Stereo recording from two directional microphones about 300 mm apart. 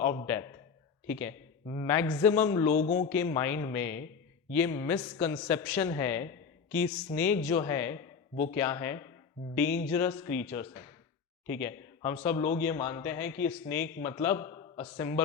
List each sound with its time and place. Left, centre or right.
0.0 s a man's voice: centre
2.8 s a man's voice: left
3.1 s a man's voice: centre